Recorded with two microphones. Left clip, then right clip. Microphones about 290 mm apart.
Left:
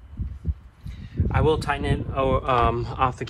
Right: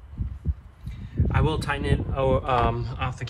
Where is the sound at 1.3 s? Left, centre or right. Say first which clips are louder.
Left 5 dB; centre.